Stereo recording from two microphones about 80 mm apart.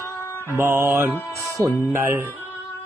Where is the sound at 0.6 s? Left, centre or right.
Right.